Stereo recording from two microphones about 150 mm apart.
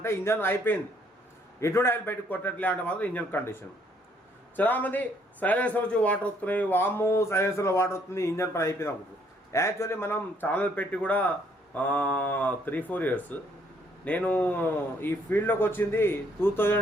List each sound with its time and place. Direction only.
0.0 s speech: 15° left (ahead or behind)